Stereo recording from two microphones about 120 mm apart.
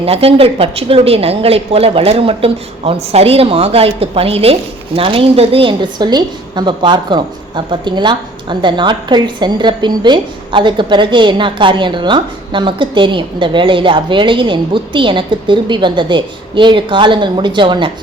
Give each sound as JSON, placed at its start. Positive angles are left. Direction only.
{"t": 0.0, "sound": "a woman's voice", "side_deg": -55}